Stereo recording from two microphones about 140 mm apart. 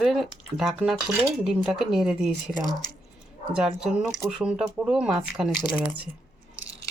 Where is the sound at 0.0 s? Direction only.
Centre (ahead or behind).